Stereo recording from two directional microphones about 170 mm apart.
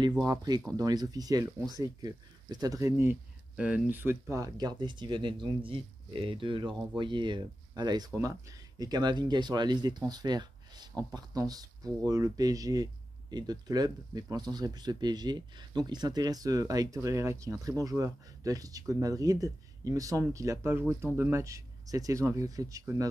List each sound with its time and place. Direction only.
0.2 s speech: 20° right (ahead or behind)